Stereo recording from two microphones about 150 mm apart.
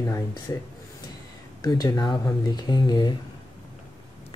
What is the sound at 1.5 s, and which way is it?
Speech, 25° left (ahead or behind).